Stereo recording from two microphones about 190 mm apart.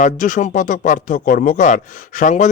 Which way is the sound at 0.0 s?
45° left (ahead or behind).